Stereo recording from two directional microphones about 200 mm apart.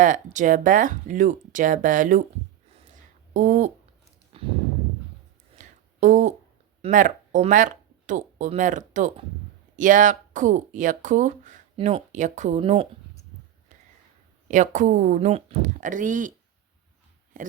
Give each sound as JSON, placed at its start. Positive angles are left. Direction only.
{"t": 0.0, "sound": "speech", "side_deg": -40}
{"t": 3.3, "sound": "speech", "side_deg": -40}
{"t": 4.3, "sound": "a sound", "side_deg": -30}
{"t": 5.5, "sound": "a sound", "side_deg": -35}
{"t": 6.8, "sound": "speech", "side_deg": -40}
{"t": 14.4, "sound": "speech", "side_deg": -40}
{"t": 17.3, "sound": "speech", "side_deg": -40}